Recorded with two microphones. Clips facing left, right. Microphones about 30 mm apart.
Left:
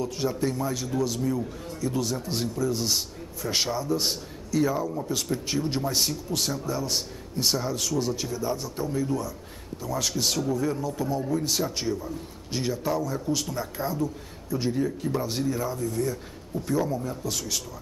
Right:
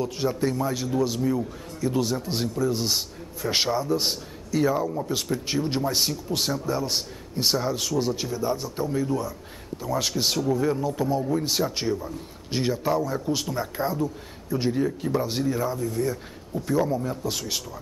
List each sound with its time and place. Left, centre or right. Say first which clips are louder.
0.0 s a man's voice: right 2 dB; centre